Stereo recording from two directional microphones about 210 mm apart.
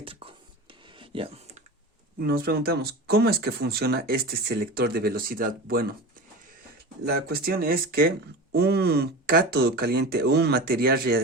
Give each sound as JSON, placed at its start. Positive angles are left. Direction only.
{"t": 0.0, "sound": "a sound", "side_deg": -25}
{"t": 2.1, "sound": "speech", "side_deg": -45}
{"t": 7.0, "sound": "speech", "side_deg": -50}